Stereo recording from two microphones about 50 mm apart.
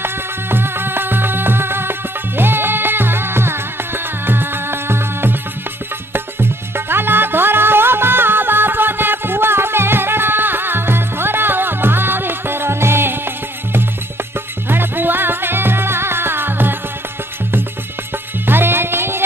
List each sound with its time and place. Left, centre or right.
0.0 s music: right
6.7 s music: right
14.7 s music: right
18.5 s music: right